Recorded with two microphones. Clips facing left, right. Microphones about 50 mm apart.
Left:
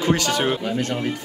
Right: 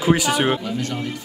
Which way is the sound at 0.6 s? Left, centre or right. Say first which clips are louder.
Left 2 dB; left.